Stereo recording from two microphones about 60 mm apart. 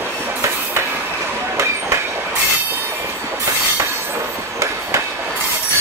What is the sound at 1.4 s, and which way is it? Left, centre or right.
Train, right.